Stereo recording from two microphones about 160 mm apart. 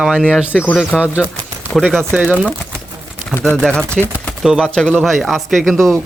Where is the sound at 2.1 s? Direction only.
10° right (ahead or behind).